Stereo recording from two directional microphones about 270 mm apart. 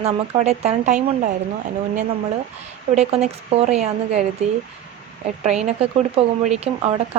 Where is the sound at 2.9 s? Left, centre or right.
Right.